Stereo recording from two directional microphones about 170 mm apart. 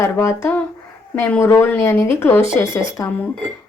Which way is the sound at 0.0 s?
15° left (ahead or behind).